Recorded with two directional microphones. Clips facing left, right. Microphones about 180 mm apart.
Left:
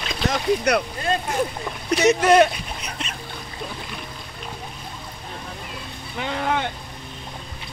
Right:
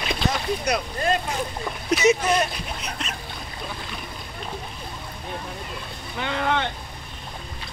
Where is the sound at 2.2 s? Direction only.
75° left (ahead or behind).